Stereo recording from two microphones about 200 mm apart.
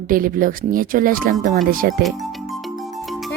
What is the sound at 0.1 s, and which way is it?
Speech, 45° right (ahead or behind).